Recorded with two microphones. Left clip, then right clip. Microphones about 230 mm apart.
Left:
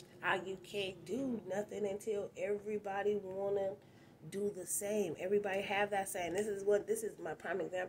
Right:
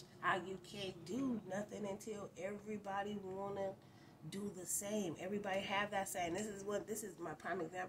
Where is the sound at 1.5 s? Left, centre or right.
Right.